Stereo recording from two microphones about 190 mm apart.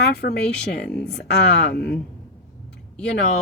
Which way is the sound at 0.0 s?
60° left (ahead or behind).